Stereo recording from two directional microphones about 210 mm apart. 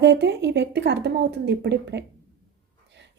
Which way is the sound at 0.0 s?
55° right (ahead or behind).